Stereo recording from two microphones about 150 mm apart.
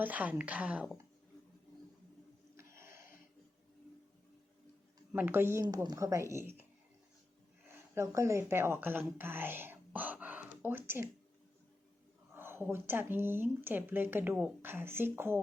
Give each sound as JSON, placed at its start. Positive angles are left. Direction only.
{"t": 0.0, "sound": "speech", "side_deg": -10}
{"t": 2.6, "sound": "a sound", "side_deg": -20}
{"t": 5.1, "sound": "speech", "side_deg": -15}
{"t": 5.6, "sound": "speech", "side_deg": -25}
{"t": 7.9, "sound": "a woman's voice", "side_deg": -20}
{"t": 12.3, "sound": "speech", "side_deg": -15}